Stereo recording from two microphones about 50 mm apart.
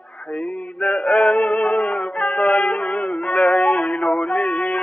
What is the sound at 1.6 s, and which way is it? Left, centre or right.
Music, left.